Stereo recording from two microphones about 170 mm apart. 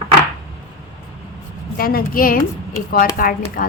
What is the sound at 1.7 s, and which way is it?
A woman's voice, 60° left (ahead or behind).